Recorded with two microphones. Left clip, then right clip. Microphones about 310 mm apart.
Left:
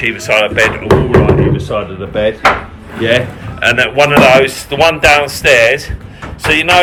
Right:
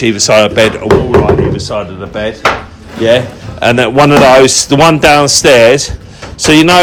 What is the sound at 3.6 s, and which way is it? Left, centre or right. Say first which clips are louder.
Speech: right 2 dB; right.